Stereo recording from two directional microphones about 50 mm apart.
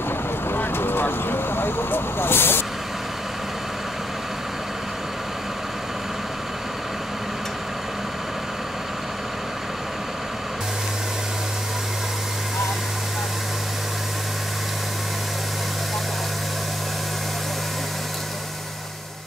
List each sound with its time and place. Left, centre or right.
0.5 s vehicle: left